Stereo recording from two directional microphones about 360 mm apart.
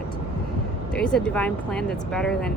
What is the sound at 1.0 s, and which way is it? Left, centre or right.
Speech, centre.